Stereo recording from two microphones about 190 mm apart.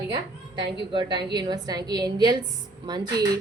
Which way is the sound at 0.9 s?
25° right (ahead or behind).